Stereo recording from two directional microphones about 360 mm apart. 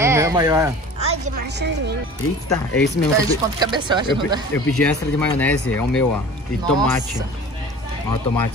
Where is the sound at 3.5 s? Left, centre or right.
Centre.